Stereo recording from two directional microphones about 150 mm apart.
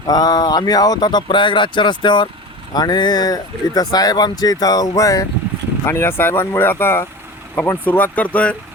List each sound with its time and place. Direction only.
0.1 s speech: 25° left (ahead or behind); by 8.5 s 10° left (ahead or behind)